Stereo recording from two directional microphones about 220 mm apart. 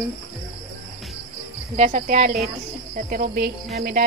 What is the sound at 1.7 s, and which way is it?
Cricket, 30° right (ahead or behind).